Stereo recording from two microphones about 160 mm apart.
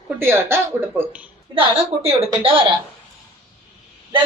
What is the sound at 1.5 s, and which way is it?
A woman's voice, 40° right (ahead or behind).